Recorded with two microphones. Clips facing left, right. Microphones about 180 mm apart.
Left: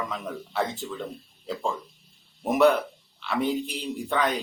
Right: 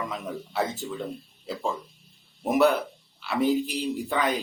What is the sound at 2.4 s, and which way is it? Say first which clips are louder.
Speech: left 1 dB; centre (ahead or behind).